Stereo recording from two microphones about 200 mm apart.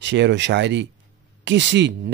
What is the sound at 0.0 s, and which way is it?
Speech, 60° right (ahead or behind).